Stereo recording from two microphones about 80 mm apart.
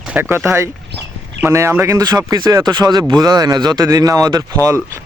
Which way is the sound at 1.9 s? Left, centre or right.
Right.